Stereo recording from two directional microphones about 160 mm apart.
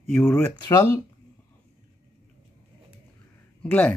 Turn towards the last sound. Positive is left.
turn(degrees=10)  # may be behind; listen again after turning